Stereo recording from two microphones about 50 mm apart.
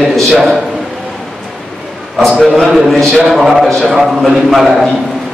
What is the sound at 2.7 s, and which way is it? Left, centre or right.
A man's voice, centre.